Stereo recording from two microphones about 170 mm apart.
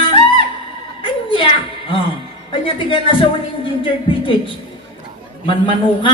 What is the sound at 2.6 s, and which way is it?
A man's voice, 30° left (ahead or behind).